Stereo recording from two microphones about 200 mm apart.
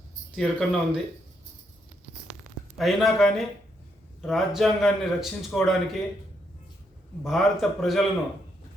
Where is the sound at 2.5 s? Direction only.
40° right (ahead or behind).